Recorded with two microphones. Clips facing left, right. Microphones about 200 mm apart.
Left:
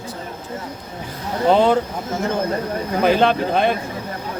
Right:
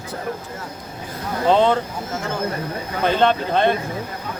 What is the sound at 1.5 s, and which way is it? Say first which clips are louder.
Speech: left 1 dB; 10° left (ahead or behind).